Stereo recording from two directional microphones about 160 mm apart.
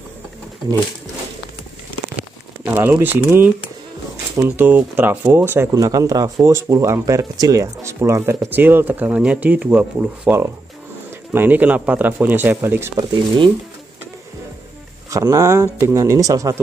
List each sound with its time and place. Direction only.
2.6 s speech: 10° right (ahead or behind)
15.0 s speech: 20° right (ahead or behind)